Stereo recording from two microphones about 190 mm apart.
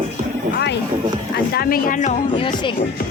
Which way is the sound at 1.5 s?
50° left (ahead or behind).